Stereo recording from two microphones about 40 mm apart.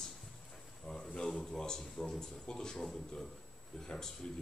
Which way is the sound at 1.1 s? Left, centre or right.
Centre.